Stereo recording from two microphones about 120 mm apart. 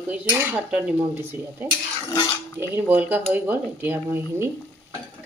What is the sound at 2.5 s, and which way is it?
Speech, 15° right (ahead or behind).